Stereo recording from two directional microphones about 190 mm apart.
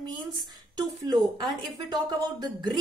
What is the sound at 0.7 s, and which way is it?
A woman's voice, 20° right (ahead or behind).